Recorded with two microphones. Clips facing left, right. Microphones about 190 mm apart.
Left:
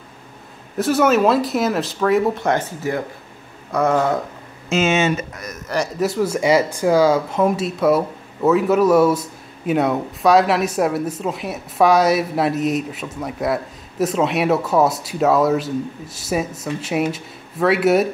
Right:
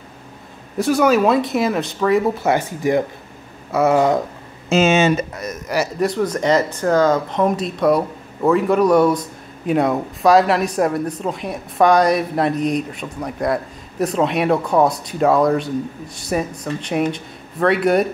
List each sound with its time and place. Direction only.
0.7 s speech: centre (ahead or behind)
4.6 s speech: 35° right (ahead or behind)
5.9 s speech: 5° left (ahead or behind)